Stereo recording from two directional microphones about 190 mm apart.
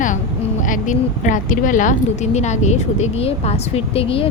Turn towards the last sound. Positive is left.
turn(degrees=30)  # may be behind; listen again after turning